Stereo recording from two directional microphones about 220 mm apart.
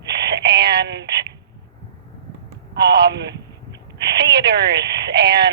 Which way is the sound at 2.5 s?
50° right (ahead or behind).